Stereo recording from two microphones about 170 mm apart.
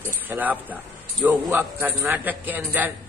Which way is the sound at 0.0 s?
10° right (ahead or behind).